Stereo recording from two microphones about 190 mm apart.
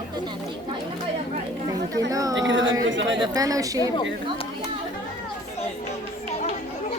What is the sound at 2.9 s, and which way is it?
Chatter, 75° right (ahead or behind).